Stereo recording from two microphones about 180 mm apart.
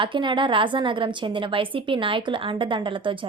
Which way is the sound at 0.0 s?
25° right (ahead or behind).